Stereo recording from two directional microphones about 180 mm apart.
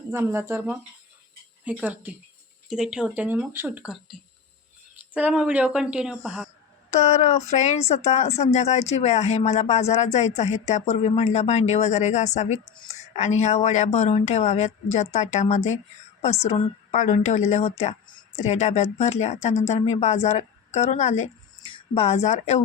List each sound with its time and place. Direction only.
0.1 s speech: 15° right (ahead or behind)
1.8 s speech: 10° right (ahead or behind)
6.9 s speech: 40° left (ahead or behind)